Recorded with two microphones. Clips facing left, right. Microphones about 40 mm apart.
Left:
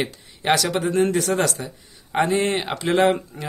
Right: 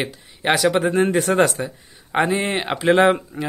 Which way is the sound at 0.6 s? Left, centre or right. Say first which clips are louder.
Right 3 dB; right.